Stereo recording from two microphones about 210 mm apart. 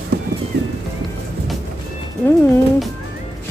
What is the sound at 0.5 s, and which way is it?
Music, 50° right (ahead or behind).